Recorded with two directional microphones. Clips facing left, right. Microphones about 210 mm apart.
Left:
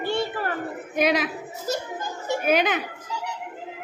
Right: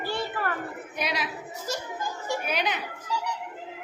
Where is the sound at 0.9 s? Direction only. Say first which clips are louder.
Left 10 dB; 50° left (ahead or behind).